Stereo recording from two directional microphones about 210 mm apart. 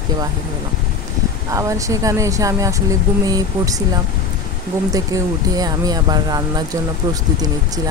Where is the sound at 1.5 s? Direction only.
15° right (ahead or behind).